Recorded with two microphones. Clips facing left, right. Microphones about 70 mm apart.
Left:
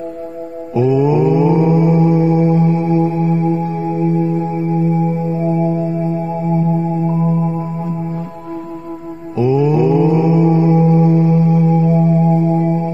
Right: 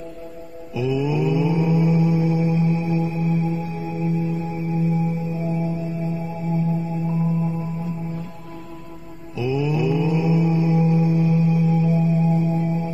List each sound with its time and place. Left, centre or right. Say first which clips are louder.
0.7 s mantra: left 9 dB; left
6.5 s music: left 7 dB; left
9.4 s mantra: left 9 dB; left